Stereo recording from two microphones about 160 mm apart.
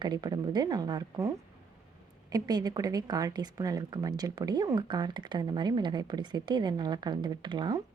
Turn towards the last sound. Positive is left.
turn(degrees=-25)  # may be behind; listen again after turning